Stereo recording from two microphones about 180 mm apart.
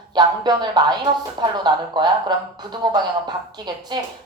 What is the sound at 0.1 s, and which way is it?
A woman's voice, 25° right (ahead or behind).